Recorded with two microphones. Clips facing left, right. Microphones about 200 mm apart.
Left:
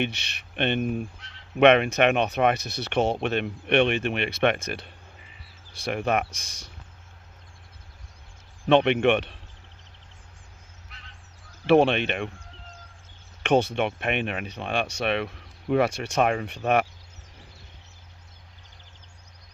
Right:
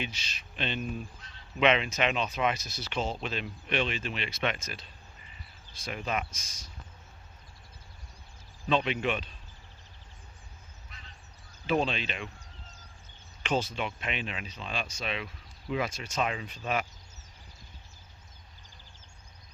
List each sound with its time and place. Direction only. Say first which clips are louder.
0.0 s speech: left 9 dB; 65° left (ahead or behind)
8.7 s speech: left 9 dB; 65° left (ahead or behind)
10.8 s a sound: left 1 dB; 70° left (ahead or behind)
11.6 s speech: left 10 dB; 70° left (ahead or behind)
13.4 s speech: left 9 dB; 65° left (ahead or behind)